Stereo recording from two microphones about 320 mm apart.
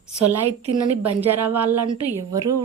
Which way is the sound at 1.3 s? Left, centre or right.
Centre.